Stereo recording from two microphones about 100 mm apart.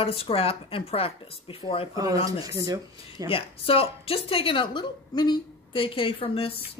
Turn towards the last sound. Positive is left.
turn(degrees=65)  # may be behind; listen again after turning